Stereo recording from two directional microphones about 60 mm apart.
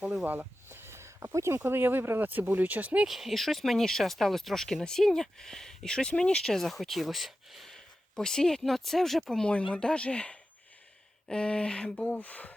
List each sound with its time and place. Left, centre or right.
0.3 s a sound: right
1.5 s speech: right
3.1 s speech: centre
8.1 s speech: centre
9.5 s speech: centre